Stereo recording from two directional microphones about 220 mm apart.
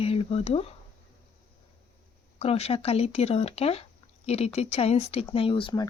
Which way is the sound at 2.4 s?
30° left (ahead or behind).